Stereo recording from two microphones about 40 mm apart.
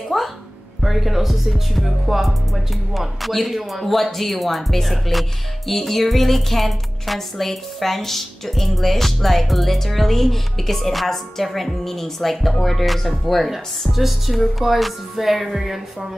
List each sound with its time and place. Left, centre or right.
0.1 s a woman's voice: centre